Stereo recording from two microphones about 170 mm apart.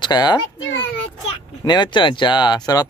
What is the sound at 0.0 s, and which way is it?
Speech, 25° left (ahead or behind).